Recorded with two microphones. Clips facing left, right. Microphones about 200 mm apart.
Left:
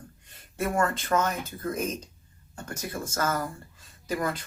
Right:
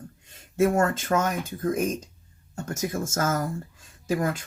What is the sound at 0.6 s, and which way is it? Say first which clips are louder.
Speech: right 5 dB; 45° right (ahead or behind).